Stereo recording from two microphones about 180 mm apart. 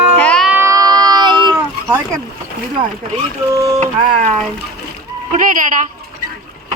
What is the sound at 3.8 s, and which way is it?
Speech, 40° right (ahead or behind).